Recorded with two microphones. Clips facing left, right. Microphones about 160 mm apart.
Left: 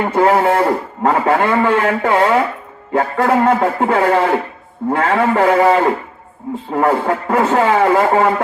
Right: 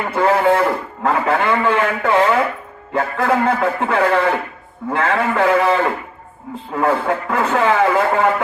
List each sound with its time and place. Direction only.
0.0 s a man's voice: 40° left (ahead or behind)